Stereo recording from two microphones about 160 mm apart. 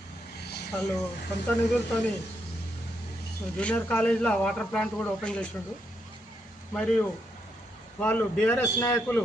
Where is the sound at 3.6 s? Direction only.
10° left (ahead or behind).